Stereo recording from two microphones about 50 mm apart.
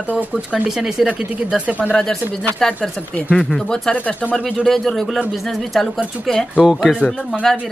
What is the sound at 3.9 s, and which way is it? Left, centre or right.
Speech, left.